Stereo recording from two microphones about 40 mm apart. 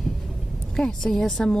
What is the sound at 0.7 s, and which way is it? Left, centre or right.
Speech, centre.